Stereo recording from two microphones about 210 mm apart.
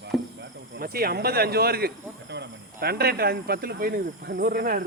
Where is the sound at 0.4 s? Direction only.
55° right (ahead or behind).